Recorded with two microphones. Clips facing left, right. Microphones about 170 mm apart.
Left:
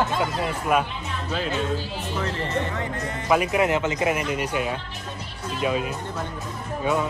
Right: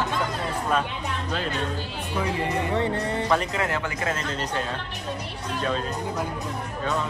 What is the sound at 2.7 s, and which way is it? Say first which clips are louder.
Music: right 5 dB; 30° right (ahead or behind).